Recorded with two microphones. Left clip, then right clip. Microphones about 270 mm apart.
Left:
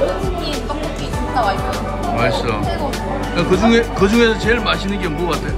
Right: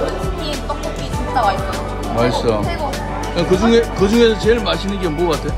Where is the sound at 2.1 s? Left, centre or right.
Centre.